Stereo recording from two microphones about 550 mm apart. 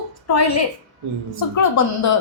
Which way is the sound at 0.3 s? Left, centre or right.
Left.